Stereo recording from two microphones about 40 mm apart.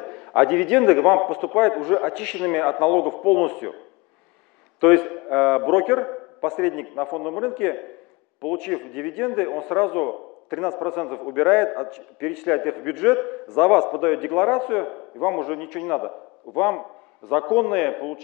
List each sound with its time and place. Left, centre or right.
0.0 s a man's voice: centre